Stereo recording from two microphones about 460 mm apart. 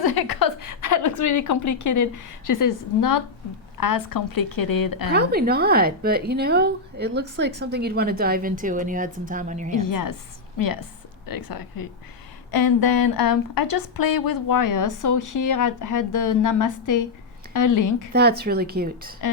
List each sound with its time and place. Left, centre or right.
0.0 s a woman's voice: left
5.1 s a woman's voice: right
9.7 s a woman's voice: left
18.1 s a woman's voice: right